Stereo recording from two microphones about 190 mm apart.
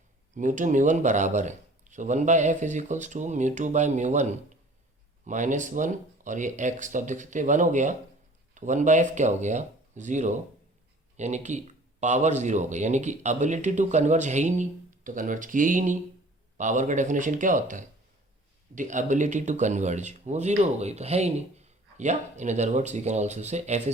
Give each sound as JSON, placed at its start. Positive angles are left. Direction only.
{"t": 0.3, "sound": "speech", "side_deg": -40}